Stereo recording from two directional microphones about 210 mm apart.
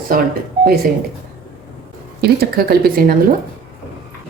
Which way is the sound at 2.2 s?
45° right (ahead or behind).